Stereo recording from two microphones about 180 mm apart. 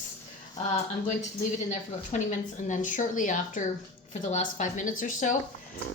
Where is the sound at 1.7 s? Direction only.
40° left (ahead or behind).